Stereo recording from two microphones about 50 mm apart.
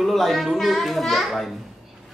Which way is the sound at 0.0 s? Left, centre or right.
Centre.